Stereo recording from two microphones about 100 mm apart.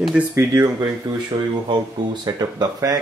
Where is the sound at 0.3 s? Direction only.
30° right (ahead or behind).